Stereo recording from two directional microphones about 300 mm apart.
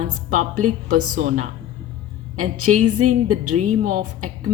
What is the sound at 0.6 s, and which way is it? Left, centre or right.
Speech, right.